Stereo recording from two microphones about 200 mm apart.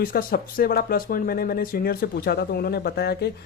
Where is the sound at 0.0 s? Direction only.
45° left (ahead or behind).